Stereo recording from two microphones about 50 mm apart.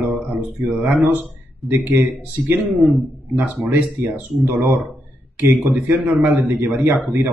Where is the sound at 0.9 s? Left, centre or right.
Right.